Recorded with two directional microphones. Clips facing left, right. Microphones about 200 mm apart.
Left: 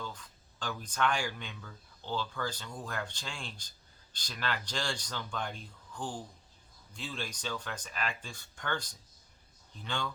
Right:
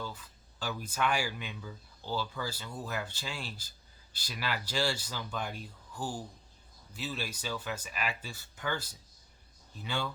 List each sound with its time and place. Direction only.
0.0 s speech: 5° right (ahead or behind)